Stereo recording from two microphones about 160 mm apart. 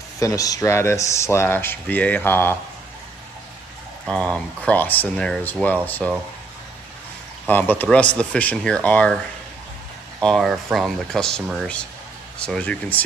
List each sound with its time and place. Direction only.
0.2 s speech: 20° left (ahead or behind)
4.0 s speech: 5° left (ahead or behind)
7.4 s speech: 10° left (ahead or behind)
10.2 s speech: centre (ahead or behind)